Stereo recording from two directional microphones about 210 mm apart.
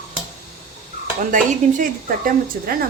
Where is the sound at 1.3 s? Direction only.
40° right (ahead or behind).